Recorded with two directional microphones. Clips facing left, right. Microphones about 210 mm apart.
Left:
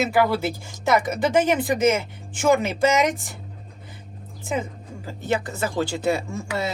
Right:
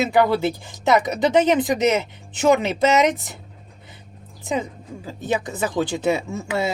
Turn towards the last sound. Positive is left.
turn(degrees=-20)  # may be behind; listen again after turning